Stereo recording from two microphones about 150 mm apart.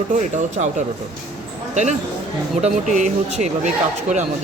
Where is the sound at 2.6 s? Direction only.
55° right (ahead or behind).